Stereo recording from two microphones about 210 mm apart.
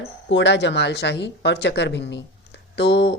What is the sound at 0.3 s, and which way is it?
A woman's voice, 55° left (ahead or behind).